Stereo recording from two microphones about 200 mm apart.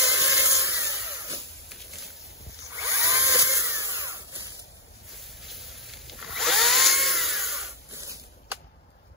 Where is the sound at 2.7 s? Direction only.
15° right (ahead or behind).